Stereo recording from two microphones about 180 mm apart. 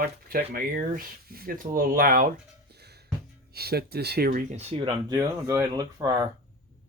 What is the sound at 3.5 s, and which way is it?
Speech, 60° right (ahead or behind).